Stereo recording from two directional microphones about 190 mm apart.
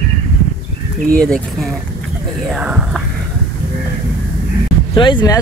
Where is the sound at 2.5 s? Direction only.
5° right (ahead or behind).